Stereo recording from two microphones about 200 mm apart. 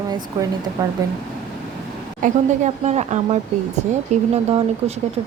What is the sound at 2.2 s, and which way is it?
A woman's voice, 40° right (ahead or behind).